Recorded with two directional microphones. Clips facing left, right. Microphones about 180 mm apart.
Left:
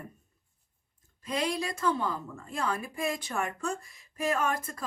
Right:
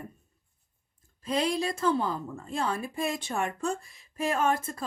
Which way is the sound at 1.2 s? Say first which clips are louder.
Right 3 dB; 30° right (ahead or behind).